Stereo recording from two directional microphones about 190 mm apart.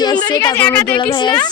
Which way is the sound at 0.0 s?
20° left (ahead or behind).